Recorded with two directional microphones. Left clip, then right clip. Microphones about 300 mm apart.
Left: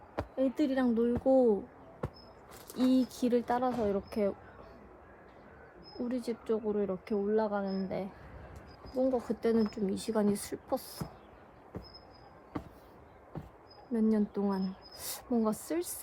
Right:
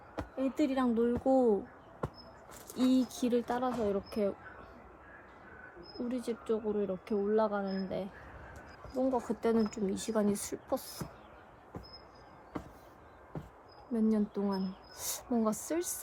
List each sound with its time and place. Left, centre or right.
0.2 s speech: centre
2.7 s speech: centre
6.1 s speech: centre
13.9 s speech: centre